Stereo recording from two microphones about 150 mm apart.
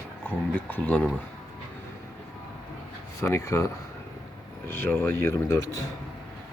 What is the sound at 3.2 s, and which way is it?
Speech, 20° left (ahead or behind).